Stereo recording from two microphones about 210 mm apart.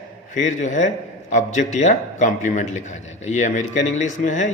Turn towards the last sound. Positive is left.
turn(degrees=35)  # may be behind; listen again after turning